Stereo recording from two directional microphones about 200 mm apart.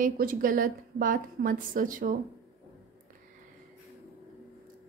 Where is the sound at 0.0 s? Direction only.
45° right (ahead or behind).